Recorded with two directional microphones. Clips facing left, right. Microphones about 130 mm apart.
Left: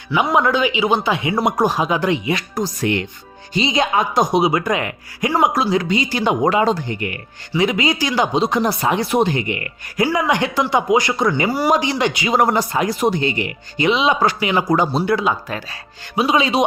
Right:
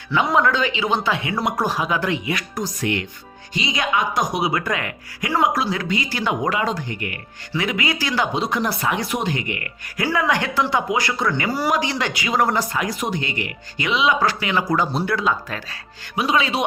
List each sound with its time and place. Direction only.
0.3 s speech: 15° left (ahead or behind)